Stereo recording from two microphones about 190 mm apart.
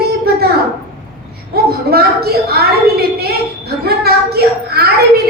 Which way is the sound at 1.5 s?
55° right (ahead or behind).